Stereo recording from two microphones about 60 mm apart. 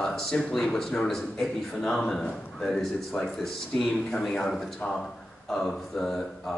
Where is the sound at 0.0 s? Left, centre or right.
Centre.